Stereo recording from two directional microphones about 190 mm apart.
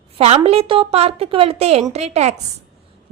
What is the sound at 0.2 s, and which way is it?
A woman's voice, 35° right (ahead or behind).